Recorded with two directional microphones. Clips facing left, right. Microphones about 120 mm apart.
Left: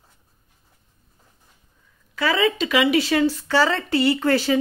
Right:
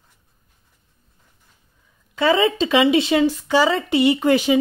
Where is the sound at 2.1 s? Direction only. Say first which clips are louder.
Right 4 dB; 25° right (ahead or behind).